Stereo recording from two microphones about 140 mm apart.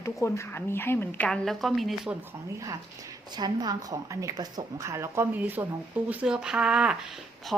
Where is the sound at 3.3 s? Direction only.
30° right (ahead or behind).